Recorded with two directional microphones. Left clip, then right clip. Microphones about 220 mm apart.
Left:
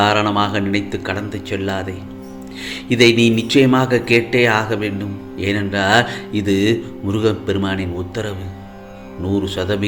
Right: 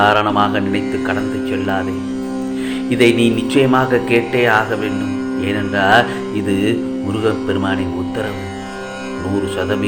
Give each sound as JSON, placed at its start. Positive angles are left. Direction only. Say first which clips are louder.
{"t": 0.0, "sound": "speech", "louder": "right 3 dB", "side_deg": 40}
{"t": 2.9, "sound": "speech", "louder": "left 1 dB", "side_deg": 45}